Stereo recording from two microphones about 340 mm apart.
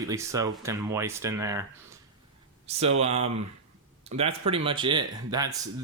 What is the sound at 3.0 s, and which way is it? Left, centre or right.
Speech, centre.